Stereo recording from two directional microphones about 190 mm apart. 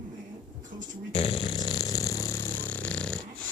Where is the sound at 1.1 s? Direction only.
30° left (ahead or behind); by 3.1 s 5° left (ahead or behind).